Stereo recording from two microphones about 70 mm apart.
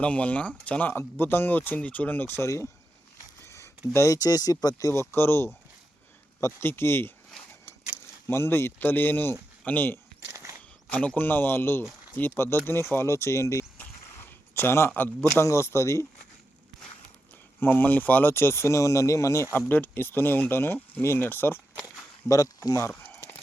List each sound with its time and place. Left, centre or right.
0.0 s speech: centre
0.9 s speech: left
3.4 s speech: left
4.9 s speech: left
8.3 s speech: left
10.2 s walk: right
10.9 s speech: centre; by 13.7 s left
13.7 s a sound: left
15.4 s speech: left
17.6 s speech: left
19.5 s speech: left
22.3 s speech: left